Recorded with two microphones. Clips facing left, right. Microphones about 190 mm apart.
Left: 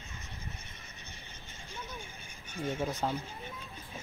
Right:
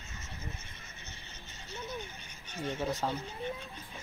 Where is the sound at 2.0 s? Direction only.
10° left (ahead or behind).